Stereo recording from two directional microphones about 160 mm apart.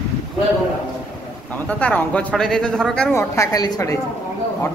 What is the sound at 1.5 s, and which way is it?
A man's voice, 10° left (ahead or behind).